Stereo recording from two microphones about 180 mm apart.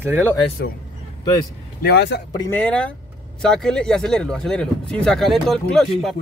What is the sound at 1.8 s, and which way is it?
Speech, 65° left (ahead or behind).